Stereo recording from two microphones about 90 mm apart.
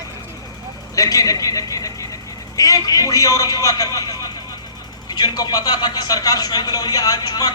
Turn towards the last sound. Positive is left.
turn(degrees=45)  # may be behind; listen again after turning